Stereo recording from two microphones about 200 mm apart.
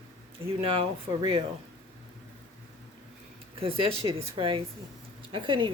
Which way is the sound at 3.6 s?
30° right (ahead or behind).